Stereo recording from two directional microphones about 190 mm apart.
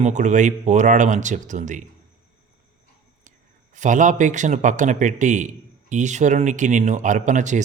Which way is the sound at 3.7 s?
40° right (ahead or behind).